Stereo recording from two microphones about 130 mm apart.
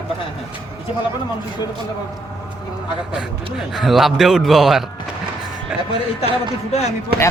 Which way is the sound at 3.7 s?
Centre (ahead or behind).